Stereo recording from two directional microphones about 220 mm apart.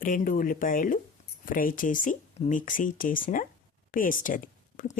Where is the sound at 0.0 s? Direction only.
40° left (ahead or behind).